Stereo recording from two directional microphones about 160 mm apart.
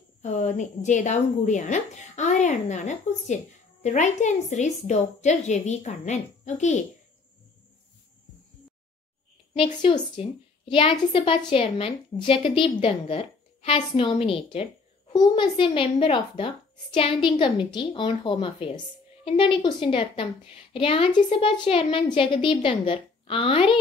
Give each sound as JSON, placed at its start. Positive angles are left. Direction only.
{"t": 0.2, "sound": "a woman's voice", "side_deg": 50}
{"t": 9.6, "sound": "a woman's voice", "side_deg": 35}